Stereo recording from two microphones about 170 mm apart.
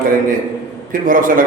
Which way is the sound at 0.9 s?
55° right (ahead or behind).